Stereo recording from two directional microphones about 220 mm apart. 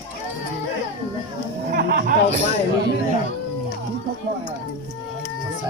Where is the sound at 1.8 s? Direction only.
45° right (ahead or behind).